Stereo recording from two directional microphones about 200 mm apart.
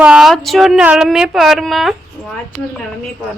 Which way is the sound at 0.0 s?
Centre (ahead or behind).